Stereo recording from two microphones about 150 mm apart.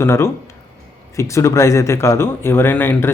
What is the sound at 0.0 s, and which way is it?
A man's voice, 15° left (ahead or behind).